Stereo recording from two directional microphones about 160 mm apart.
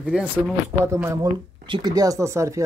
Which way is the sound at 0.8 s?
15° right (ahead or behind).